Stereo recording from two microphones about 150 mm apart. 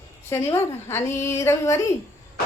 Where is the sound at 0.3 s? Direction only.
15° left (ahead or behind).